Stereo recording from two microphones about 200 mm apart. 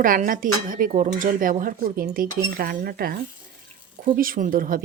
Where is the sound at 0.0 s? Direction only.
45° right (ahead or behind).